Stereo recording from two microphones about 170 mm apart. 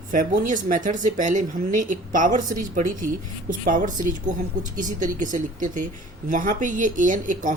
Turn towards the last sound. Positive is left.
turn(degrees=-50)  # may be behind; listen again after turning